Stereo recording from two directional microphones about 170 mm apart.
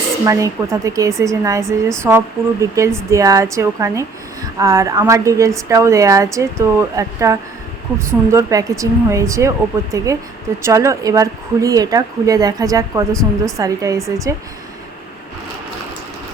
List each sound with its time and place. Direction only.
0.3 s speech: 20° right (ahead or behind)